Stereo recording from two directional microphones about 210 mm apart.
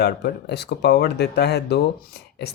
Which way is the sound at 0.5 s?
50° left (ahead or behind).